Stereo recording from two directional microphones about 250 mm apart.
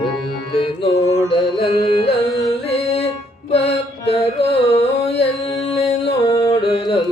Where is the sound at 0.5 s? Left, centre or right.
Left.